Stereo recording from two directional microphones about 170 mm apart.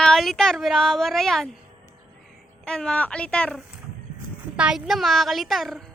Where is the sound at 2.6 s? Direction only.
5° left (ahead or behind).